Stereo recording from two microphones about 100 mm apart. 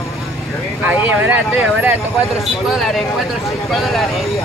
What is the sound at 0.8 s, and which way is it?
Speech, 15° right (ahead or behind).